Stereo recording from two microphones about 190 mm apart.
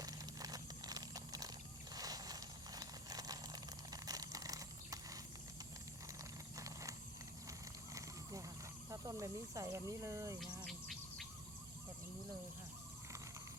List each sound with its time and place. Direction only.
0.0 s a sound: 20° right (ahead or behind)
6.6 s mechanisms: 15° right (ahead or behind)
7.9 s wild animals: 15° right (ahead or behind)
8.9 s speech: 15° right (ahead or behind)
10.6 s insect: centre (ahead or behind)